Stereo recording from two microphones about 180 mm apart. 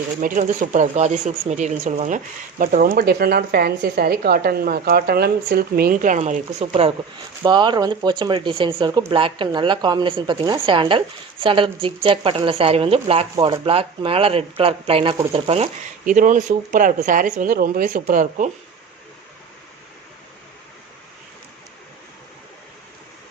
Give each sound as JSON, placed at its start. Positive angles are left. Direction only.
{"t": 0.2, "sound": "a woman's voice", "side_deg": -50}
{"t": 7.4, "sound": "a woman's voice", "side_deg": -25}
{"t": 16.0, "sound": "speech", "side_deg": -45}